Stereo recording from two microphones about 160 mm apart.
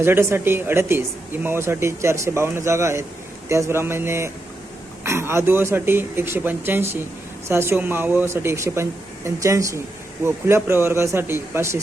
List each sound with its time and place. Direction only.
0.0 s speech: 15° right (ahead or behind)